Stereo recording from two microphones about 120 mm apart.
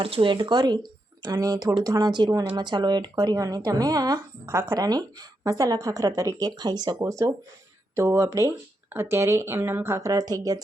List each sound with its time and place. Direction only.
0.0 s speech: 45° right (ahead or behind); by 10.6 s 30° right (ahead or behind)